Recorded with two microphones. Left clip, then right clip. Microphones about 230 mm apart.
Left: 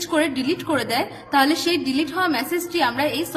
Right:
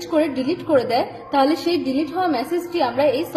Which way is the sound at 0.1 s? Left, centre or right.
Centre.